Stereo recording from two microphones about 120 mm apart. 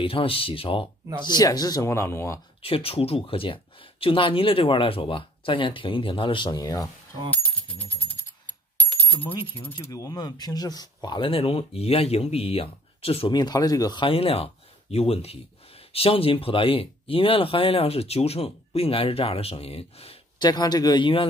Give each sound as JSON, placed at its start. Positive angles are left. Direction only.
{"t": 0.0, "sound": "speech", "side_deg": 50}
{"t": 1.2, "sound": "speech", "side_deg": 35}
{"t": 2.6, "sound": "speech", "side_deg": 50}
{"t": 9.1, "sound": "coin", "side_deg": 15}
{"t": 9.8, "sound": "speech", "side_deg": 30}
{"t": 13.3, "sound": "speech", "side_deg": 35}
{"t": 14.0, "sound": "speech", "side_deg": 50}
{"t": 20.3, "sound": "speech", "side_deg": 35}